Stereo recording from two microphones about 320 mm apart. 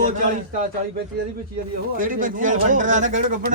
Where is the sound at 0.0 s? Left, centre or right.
Right.